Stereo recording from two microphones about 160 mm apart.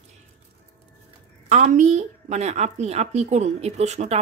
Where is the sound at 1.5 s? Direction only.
50° right (ahead or behind).